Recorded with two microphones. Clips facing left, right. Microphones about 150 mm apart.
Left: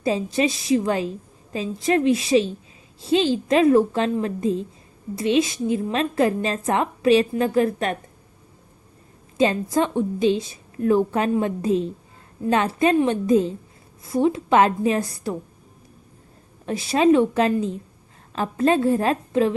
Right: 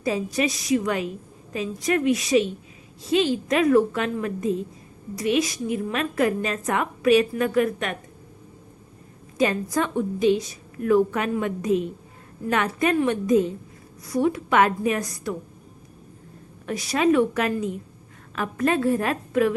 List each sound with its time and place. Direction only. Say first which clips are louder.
0.0 s a woman's voice: left 3 dB; 25° left (ahead or behind)
9.4 s a woman's voice: left 3 dB; 25° left (ahead or behind)
16.6 s a woman's voice: left 4 dB; 25° left (ahead or behind)